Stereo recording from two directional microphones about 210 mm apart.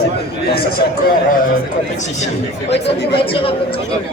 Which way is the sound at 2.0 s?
35° left (ahead or behind).